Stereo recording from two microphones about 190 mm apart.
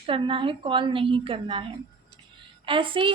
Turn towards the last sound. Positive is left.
turn(degrees=-25)  # may be behind; listen again after turning